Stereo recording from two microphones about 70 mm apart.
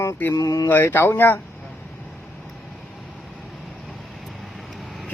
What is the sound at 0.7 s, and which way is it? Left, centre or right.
Speech, left.